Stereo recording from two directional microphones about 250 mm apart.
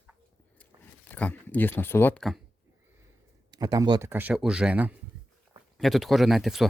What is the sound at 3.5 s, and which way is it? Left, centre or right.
Speech, centre.